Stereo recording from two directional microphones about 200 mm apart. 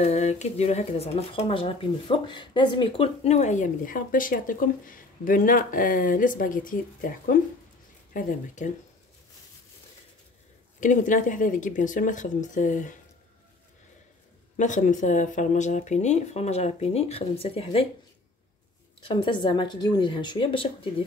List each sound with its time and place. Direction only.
0.0 s speech: 35° left (ahead or behind)
10.8 s speech: 40° left (ahead or behind)
14.6 s speech: 40° left (ahead or behind)
19.0 s a woman's voice: 25° left (ahead or behind)